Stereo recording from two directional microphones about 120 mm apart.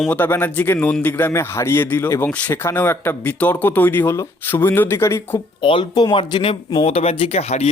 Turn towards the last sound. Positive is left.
turn(degrees=65)  # may be behind; listen again after turning